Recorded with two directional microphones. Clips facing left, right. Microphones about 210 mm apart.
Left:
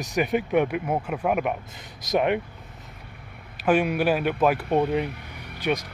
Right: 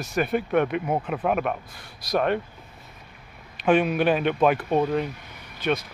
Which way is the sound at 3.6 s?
10° left (ahead or behind).